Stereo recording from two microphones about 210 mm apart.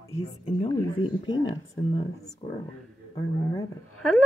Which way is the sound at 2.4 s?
25° left (ahead or behind).